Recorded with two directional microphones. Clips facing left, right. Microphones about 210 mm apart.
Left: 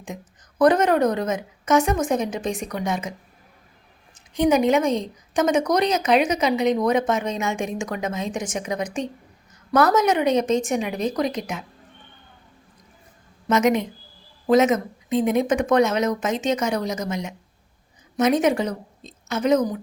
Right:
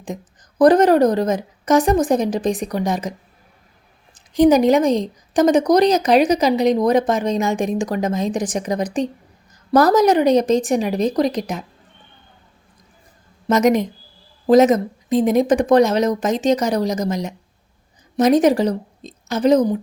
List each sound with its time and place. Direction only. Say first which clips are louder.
0.6 s a woman's voice: right 5 dB; 35° right (ahead or behind)
4.1 s a woman's voice: right 6 dB; 35° right (ahead or behind)
13.5 s a woman's voice: right 4 dB; 40° right (ahead or behind)